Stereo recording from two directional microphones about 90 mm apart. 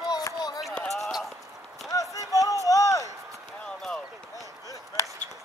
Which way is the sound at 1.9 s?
40° left (ahead or behind).